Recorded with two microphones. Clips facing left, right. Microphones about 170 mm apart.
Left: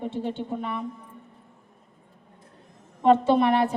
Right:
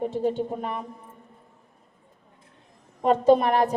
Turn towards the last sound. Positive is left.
turn(degrees=-40)  # may be behind; listen again after turning